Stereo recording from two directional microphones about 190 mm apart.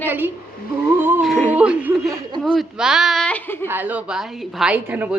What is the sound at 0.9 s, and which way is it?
Speech, 10° right (ahead or behind).